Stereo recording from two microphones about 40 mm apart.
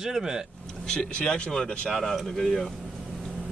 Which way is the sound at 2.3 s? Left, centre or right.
Centre.